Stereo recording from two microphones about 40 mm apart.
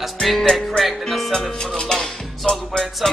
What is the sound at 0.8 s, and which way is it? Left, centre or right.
Music, centre.